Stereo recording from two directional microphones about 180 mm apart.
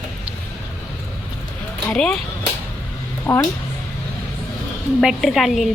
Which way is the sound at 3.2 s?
15° left (ahead or behind).